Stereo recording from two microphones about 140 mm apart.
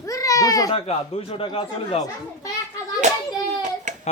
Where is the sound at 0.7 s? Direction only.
45° left (ahead or behind).